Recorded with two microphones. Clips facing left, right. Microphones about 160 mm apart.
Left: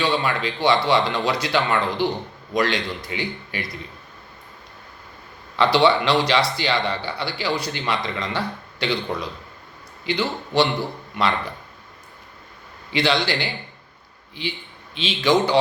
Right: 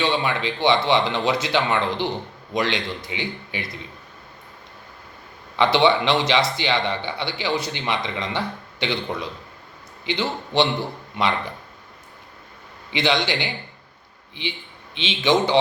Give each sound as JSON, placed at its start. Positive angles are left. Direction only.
{"t": 0.0, "sound": "a man's voice", "side_deg": -20}
{"t": 5.5, "sound": "a man's voice", "side_deg": -20}
{"t": 12.9, "sound": "a man's voice", "side_deg": -20}
{"t": 14.9, "sound": "a man's voice", "side_deg": -20}